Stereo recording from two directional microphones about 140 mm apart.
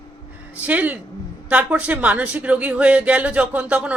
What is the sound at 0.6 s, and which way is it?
Speech, 10° right (ahead or behind).